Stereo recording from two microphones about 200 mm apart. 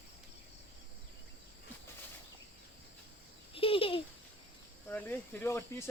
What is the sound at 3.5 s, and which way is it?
Babbling, 25° left (ahead or behind).